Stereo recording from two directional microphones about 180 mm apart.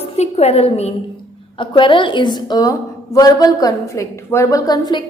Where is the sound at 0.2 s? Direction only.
35° left (ahead or behind).